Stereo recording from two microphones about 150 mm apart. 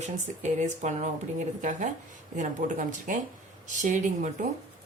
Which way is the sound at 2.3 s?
55° right (ahead or behind).